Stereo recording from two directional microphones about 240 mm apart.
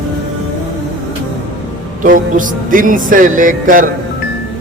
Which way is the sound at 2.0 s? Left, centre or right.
Right.